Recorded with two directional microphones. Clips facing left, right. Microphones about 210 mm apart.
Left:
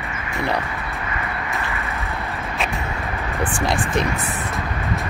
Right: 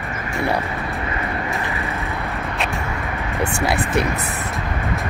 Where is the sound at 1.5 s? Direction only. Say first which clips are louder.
Right 2 dB; centre (ahead or behind).